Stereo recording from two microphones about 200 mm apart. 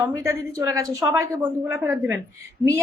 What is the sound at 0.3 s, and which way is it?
A woman's voice, 15° right (ahead or behind).